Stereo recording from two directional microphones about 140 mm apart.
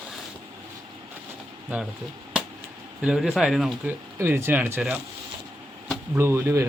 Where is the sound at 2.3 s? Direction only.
5° right (ahead or behind).